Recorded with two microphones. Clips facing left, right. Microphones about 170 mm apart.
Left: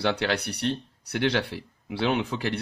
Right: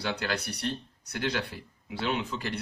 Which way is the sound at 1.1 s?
75° left (ahead or behind).